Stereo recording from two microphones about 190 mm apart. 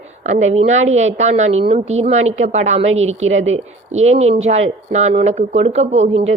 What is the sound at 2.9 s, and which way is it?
Speech, 90° right.